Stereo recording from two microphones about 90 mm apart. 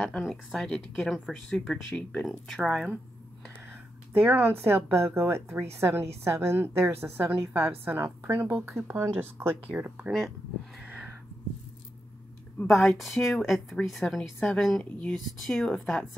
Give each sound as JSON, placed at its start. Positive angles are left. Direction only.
{"t": 0.2, "sound": "a woman's voice", "side_deg": 0}
{"t": 4.1, "sound": "speech", "side_deg": -20}
{"t": 10.1, "sound": "a woman's voice", "side_deg": 0}
{"t": 10.8, "sound": "a sound", "side_deg": -15}
{"t": 12.6, "sound": "a woman's voice", "side_deg": 0}
{"t": 15.1, "sound": "a woman's voice", "side_deg": 5}